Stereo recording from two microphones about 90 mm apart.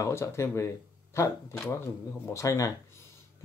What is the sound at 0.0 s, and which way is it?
Speech, 35° left (ahead or behind).